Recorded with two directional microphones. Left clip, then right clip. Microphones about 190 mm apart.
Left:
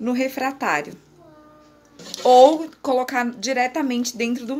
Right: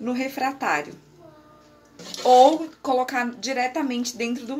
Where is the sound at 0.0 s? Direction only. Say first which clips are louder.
Left 3 dB; 45° left (ahead or behind).